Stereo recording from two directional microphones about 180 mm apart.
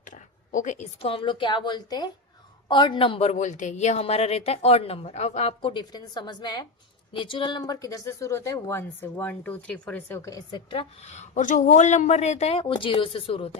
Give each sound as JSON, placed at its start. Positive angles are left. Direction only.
{"t": 0.0, "sound": "a woman's voice", "side_deg": 45}